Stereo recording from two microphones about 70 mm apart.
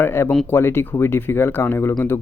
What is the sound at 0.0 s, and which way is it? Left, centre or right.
Speech, left.